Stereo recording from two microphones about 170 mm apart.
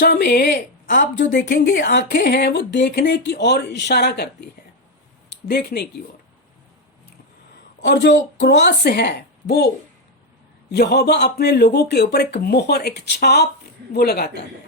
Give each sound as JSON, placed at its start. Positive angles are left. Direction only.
{"t": 0.0, "sound": "speech", "side_deg": 85}
{"t": 1.3, "sound": "a woman's voice", "side_deg": 50}
{"t": 1.9, "sound": "speech", "side_deg": 80}
{"t": 7.8, "sound": "speech", "side_deg": 90}